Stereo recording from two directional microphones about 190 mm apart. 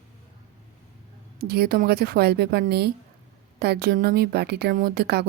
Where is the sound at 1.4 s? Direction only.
55° right (ahead or behind).